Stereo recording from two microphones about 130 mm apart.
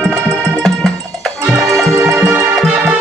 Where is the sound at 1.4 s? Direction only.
20° right (ahead or behind).